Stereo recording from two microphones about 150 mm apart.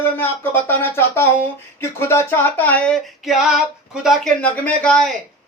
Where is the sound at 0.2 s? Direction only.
15° left (ahead or behind).